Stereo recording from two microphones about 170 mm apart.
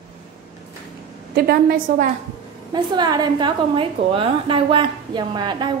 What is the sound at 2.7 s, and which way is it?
A woman's voice, 25° right (ahead or behind).